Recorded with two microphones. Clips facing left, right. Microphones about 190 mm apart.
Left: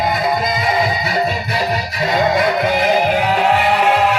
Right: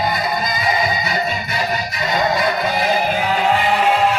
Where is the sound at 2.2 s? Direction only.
60° left (ahead or behind).